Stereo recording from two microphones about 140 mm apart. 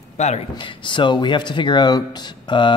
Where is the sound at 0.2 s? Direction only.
55° left (ahead or behind).